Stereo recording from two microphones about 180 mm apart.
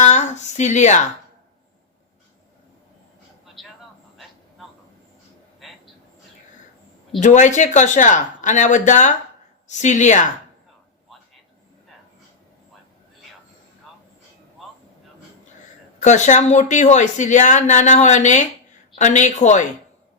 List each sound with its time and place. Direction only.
0.0 s speech: 40° left (ahead or behind)
3.4 s vehicle: centre (ahead or behind)
5.5 s a sound: centre (ahead or behind)
7.2 s speech: 45° left (ahead or behind)
16.0 s speech: 40° left (ahead or behind)